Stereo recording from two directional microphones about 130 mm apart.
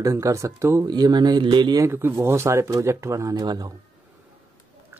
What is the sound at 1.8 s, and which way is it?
Speech, 20° right (ahead or behind).